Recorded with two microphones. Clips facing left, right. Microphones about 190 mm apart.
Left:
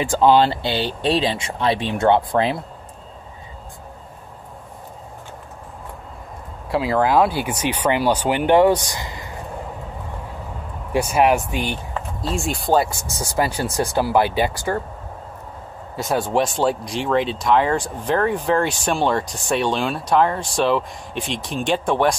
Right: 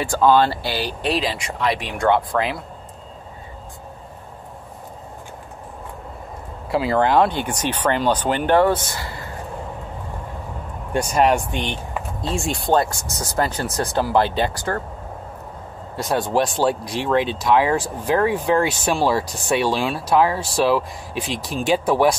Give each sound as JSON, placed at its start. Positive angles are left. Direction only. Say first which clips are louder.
{"t": 0.0, "sound": "speech", "louder": "left 1 dB", "side_deg": 20}
{"t": 6.7, "sound": "speech", "louder": "even", "side_deg": 0}
{"t": 10.9, "sound": "speech", "louder": "left 1 dB", "side_deg": 5}
{"t": 16.0, "sound": "speech", "louder": "even", "side_deg": 0}